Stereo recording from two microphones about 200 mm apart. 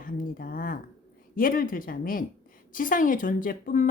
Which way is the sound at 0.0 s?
45° left (ahead or behind).